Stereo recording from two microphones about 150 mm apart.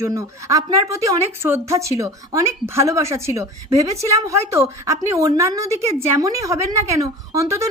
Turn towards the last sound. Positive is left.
turn(degrees=-20)  # may be behind; listen again after turning